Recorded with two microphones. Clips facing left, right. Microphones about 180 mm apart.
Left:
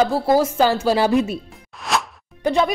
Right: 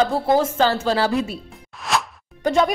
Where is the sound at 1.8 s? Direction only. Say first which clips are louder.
Even; centre (ahead or behind).